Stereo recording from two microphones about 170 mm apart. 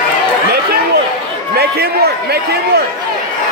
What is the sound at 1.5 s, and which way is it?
A man's voice, 65° right (ahead or behind).